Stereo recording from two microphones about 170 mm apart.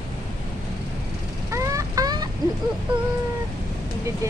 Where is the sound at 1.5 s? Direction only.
20° right (ahead or behind).